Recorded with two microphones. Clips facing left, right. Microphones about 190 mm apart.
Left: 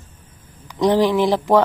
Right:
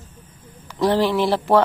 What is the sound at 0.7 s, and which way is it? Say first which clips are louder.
Speech: left 2 dB; 15° left (ahead or behind).